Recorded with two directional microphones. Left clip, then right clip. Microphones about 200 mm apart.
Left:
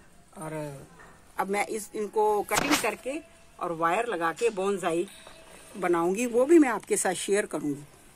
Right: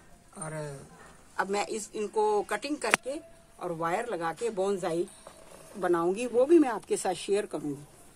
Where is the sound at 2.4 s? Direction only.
35° left (ahead or behind).